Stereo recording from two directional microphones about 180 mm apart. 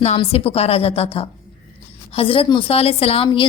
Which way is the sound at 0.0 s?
35° left (ahead or behind).